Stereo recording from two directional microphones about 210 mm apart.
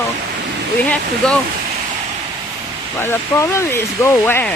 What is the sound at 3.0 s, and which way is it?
Speech, 10° left (ahead or behind).